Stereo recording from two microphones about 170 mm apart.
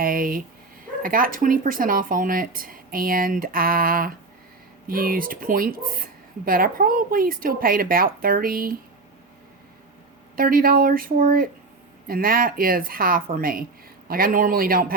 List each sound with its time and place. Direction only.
0.0 s a sound: 55° right (ahead or behind)
1.0 s speech: 55° right (ahead or behind)
10.3 s speech: 60° right (ahead or behind)